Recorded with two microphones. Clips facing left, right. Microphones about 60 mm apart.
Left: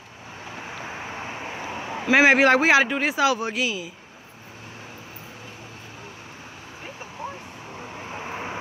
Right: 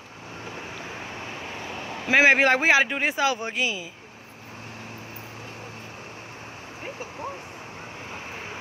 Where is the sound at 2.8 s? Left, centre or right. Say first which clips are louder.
Left 2 dB; centre.